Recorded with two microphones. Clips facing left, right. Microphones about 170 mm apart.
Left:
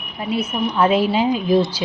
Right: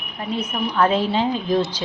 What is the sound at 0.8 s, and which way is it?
Speech, 10° left (ahead or behind).